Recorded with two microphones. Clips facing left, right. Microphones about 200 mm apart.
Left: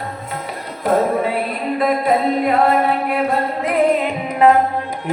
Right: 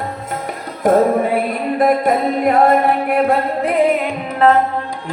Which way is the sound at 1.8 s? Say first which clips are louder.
Right 2 dB; 50° right (ahead or behind).